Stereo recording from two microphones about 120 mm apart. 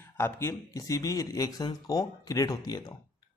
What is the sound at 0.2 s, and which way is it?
A man's voice, 25° left (ahead or behind).